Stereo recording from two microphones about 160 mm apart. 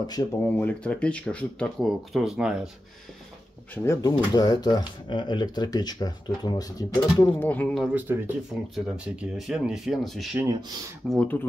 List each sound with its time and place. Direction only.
0.0 s speech: 25° left (ahead or behind)
0.6 s speech: 10° left (ahead or behind)
3.7 s speech: 20° left (ahead or behind)
7.2 s speech: 10° left (ahead or behind)
7.9 s speech: 10° right (ahead or behind); by 11.3 s 5° left (ahead or behind)